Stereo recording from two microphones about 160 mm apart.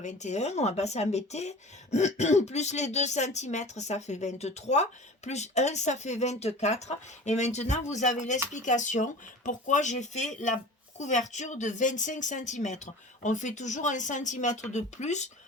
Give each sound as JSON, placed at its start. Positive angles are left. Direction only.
{"t": 0.0, "sound": "speech", "side_deg": 50}